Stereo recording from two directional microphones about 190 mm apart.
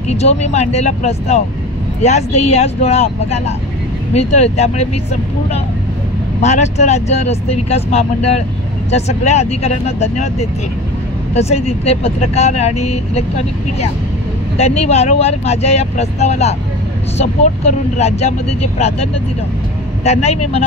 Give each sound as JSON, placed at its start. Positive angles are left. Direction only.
{"t": 0.1, "sound": "speech", "side_deg": 35}
{"t": 6.4, "sound": "speech", "side_deg": 35}
{"t": 11.3, "sound": "speech", "side_deg": 35}
{"t": 14.6, "sound": "speech", "side_deg": 35}
{"t": 20.1, "sound": "speech", "side_deg": 35}